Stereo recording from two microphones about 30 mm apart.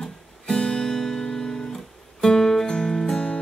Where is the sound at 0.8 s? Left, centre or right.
Centre.